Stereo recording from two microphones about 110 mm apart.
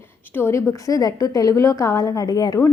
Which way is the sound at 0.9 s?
35° left (ahead or behind).